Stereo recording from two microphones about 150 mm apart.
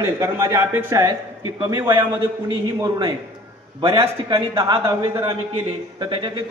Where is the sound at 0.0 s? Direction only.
15° right (ahead or behind).